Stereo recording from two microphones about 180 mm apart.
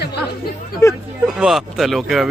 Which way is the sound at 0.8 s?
15° left (ahead or behind).